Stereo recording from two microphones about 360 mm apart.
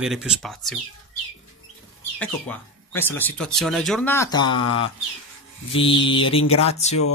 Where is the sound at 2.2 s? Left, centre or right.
Centre.